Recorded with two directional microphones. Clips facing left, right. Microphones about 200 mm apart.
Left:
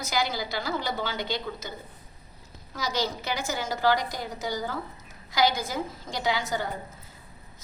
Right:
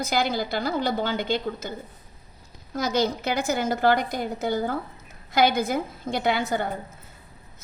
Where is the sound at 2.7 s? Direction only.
55° right (ahead or behind).